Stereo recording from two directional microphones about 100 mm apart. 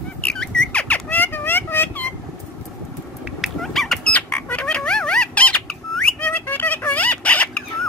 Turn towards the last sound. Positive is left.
turn(degrees=15)  # may be behind; listen again after turning